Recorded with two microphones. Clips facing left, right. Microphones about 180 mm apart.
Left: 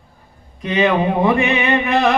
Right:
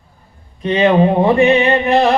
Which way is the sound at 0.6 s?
35° right (ahead or behind).